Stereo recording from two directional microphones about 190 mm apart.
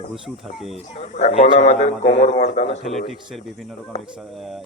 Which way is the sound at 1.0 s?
35° left (ahead or behind).